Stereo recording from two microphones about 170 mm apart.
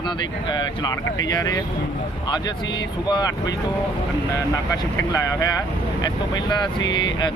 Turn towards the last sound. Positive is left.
turn(degrees=20)  # may be behind; listen again after turning